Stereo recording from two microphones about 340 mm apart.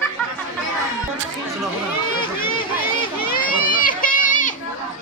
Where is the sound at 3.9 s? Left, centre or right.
Left.